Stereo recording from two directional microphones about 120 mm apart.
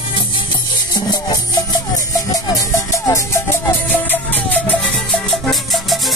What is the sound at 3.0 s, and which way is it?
Music, 25° left (ahead or behind).